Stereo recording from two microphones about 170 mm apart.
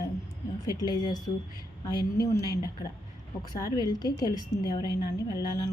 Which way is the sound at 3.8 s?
25° left (ahead or behind).